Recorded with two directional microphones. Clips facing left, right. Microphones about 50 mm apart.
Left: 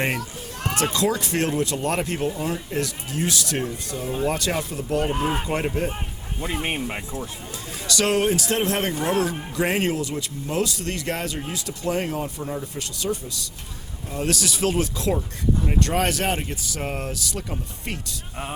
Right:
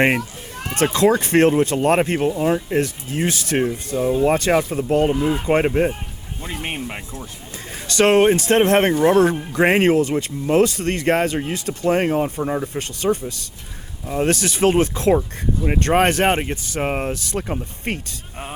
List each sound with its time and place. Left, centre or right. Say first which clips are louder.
0.9 s speech: right 11 dB; right
5.1 s speech: right 4 dB; left
5.5 s speech: right 8 dB; right
6.4 s speech: left 1 dB; centre
7.9 s speech: right 7 dB; right